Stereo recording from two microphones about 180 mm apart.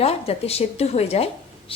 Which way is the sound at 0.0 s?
35° left (ahead or behind).